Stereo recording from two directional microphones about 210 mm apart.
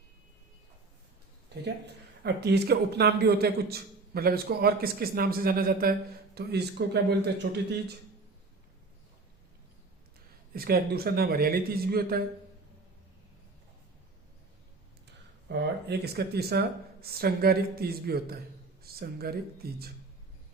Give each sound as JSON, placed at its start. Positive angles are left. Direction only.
{"t": 1.5, "sound": "a man's voice", "side_deg": -55}
{"t": 10.5, "sound": "a man's voice", "side_deg": -45}
{"t": 15.4, "sound": "a man's voice", "side_deg": -50}